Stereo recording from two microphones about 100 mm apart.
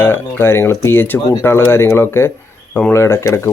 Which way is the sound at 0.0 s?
20° left (ahead or behind).